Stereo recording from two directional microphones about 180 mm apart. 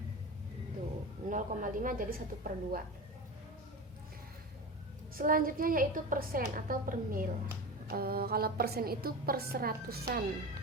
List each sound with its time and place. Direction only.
1.3 s a woman's voice: 45° right (ahead or behind)
5.1 s a woman's voice: 50° right (ahead or behind)